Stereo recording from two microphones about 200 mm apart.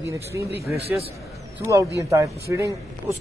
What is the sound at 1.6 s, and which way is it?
Speech, 15° right (ahead or behind).